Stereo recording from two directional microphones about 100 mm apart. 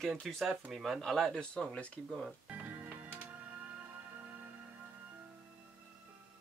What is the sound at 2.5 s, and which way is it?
Music, 20° right (ahead or behind).